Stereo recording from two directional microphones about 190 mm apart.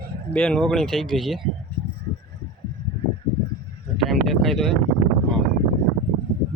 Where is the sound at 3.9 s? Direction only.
Centre (ahead or behind).